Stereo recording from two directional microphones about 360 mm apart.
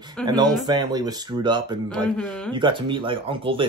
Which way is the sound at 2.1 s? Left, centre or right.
Centre.